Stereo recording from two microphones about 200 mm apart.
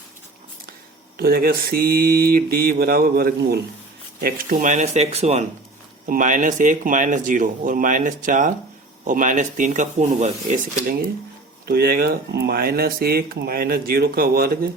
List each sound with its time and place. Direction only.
1.1 s speech: 50° right (ahead or behind)
11.6 s speech: 50° right (ahead or behind)